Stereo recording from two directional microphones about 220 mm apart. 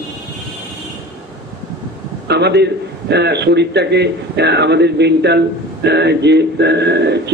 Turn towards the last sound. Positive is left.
turn(degrees=-50)  # may be behind; listen again after turning